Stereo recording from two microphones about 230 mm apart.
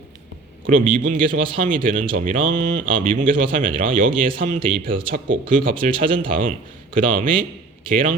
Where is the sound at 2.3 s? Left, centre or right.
Right.